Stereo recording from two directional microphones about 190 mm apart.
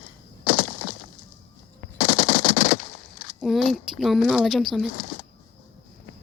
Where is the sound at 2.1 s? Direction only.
25° left (ahead or behind).